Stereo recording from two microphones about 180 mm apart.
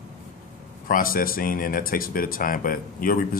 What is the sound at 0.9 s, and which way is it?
Speech, 50° left (ahead or behind).